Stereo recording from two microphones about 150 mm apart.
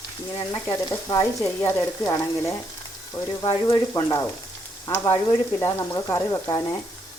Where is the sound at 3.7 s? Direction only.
20° left (ahead or behind).